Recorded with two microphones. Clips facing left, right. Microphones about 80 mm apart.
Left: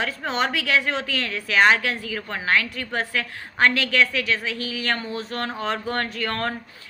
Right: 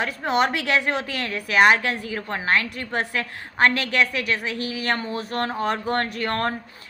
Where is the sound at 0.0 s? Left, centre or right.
Right.